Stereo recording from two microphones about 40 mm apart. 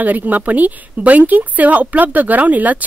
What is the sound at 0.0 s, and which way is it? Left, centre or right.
Speech, right.